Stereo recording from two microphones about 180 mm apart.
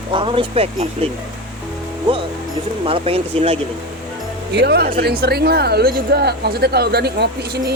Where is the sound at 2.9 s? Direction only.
30° right (ahead or behind).